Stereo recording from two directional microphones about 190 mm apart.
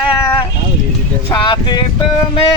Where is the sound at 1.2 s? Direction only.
25° left (ahead or behind).